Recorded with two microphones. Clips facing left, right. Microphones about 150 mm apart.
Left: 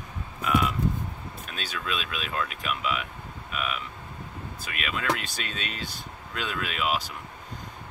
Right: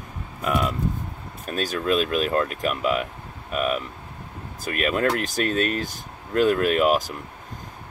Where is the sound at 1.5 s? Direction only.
45° right (ahead or behind).